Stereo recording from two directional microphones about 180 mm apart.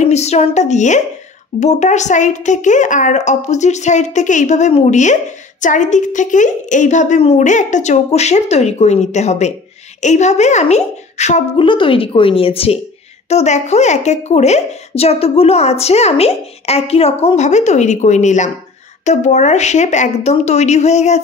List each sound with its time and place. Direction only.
0.0 s a woman's voice: 35° left (ahead or behind)
11.6 s a woman's voice: 30° left (ahead or behind)